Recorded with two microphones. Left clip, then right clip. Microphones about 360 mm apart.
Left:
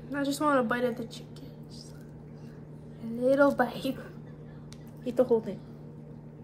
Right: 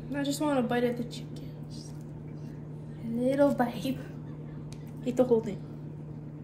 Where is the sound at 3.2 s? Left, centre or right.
Centre.